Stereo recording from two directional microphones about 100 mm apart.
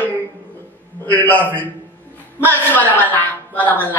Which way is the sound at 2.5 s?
15° left (ahead or behind).